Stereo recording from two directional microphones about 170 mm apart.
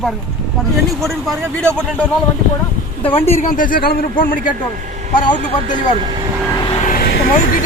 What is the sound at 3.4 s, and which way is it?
Speech, 50° left (ahead or behind).